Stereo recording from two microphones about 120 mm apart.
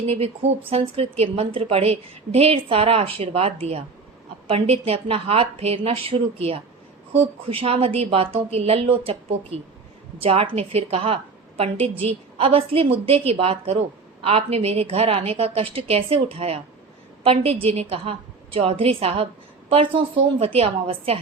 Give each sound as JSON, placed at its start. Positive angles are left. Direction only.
{"t": 0.1, "sound": "a woman's voice", "side_deg": -60}